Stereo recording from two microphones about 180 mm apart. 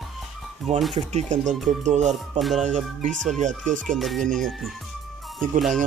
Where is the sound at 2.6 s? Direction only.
40° right (ahead or behind).